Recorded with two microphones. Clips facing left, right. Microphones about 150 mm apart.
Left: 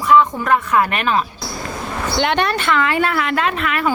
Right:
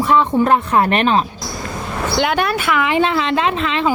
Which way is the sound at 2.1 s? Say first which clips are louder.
Right 1 dB; 5° right (ahead or behind).